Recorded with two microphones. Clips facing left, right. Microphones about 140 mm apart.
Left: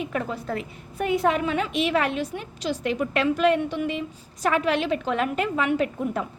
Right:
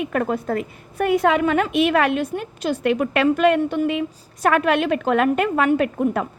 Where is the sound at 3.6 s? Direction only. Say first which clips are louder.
Right 6 dB; 40° right (ahead or behind).